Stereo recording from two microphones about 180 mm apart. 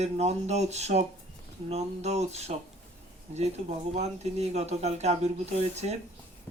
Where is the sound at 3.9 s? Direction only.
35° right (ahead or behind).